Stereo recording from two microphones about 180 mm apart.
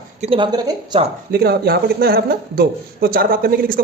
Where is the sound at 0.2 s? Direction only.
30° right (ahead or behind).